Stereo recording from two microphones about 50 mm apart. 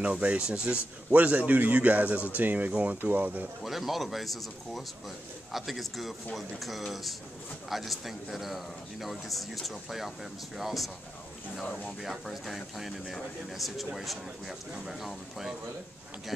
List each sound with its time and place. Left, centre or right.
0.0 s speech: right
3.6 s a man's voice: centre
11.6 s speech: left
12.0 s a man's voice: centre